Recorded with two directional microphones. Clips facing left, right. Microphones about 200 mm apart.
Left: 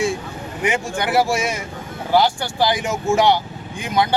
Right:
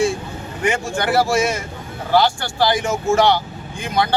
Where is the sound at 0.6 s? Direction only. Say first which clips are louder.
Right 1 dB; 20° left (ahead or behind).